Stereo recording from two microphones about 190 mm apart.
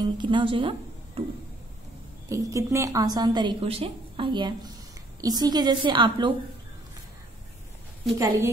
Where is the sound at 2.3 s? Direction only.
15° right (ahead or behind).